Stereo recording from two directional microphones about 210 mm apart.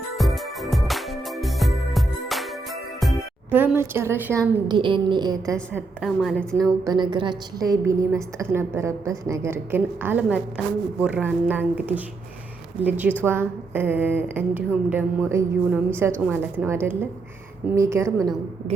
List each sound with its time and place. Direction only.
0.2 s music: centre (ahead or behind)
3.0 s speech: 5° right (ahead or behind)
5.5 s a woman's voice: 5° left (ahead or behind)
6.8 s a woman's voice: 20° right (ahead or behind)